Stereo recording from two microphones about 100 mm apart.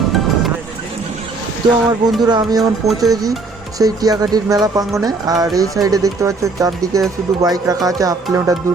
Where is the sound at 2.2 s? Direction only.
45° right (ahead or behind).